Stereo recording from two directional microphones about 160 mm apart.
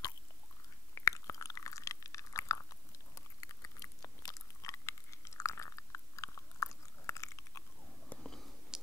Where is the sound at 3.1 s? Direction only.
20° left (ahead or behind).